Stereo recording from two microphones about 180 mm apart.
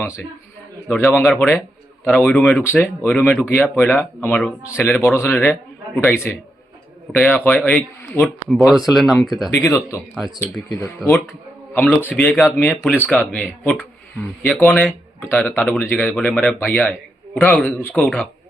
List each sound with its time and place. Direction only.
0.9 s a man's voice: 5° left (ahead or behind)
9.5 s a man's voice: 15° left (ahead or behind)